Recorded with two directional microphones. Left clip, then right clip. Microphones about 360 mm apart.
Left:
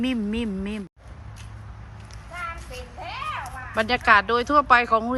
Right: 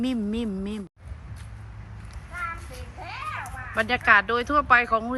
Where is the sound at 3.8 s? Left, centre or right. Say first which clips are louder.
Left 1 dB; centre.